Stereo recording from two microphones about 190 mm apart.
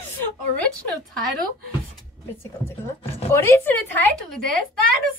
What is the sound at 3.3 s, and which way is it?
Speech, 10° left (ahead or behind).